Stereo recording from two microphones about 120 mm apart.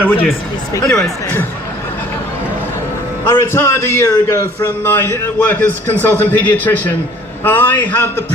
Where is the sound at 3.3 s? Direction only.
20° left (ahead or behind).